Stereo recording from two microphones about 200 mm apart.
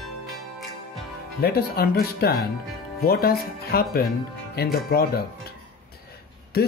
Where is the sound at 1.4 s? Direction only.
50° left (ahead or behind).